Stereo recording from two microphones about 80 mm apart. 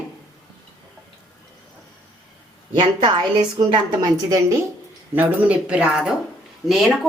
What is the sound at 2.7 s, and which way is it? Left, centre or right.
A woman's voice, right.